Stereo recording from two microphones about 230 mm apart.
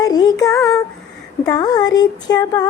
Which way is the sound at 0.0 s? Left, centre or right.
Centre.